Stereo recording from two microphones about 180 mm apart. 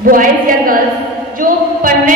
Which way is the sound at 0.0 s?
50° right (ahead or behind).